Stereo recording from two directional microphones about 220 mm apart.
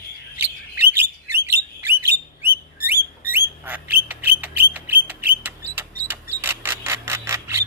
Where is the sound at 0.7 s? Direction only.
10° right (ahead or behind).